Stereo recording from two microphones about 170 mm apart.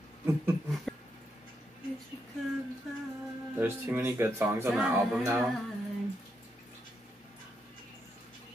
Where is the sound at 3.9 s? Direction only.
15° right (ahead or behind).